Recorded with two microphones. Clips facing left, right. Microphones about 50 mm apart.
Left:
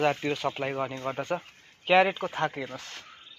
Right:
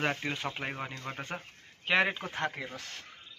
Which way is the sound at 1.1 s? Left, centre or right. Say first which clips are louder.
Left 8 dB; centre.